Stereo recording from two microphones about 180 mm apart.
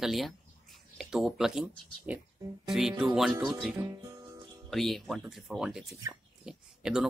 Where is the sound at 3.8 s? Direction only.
20° right (ahead or behind).